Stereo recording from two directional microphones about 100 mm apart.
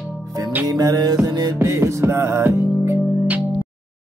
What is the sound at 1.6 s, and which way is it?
Music, 30° right (ahead or behind).